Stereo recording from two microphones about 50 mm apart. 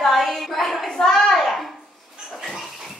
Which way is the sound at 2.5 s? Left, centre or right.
Centre.